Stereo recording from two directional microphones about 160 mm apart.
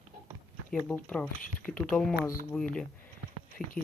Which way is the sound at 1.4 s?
60° left (ahead or behind).